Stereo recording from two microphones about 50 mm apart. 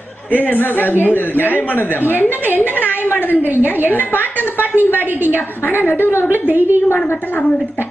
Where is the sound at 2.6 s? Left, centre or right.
Left.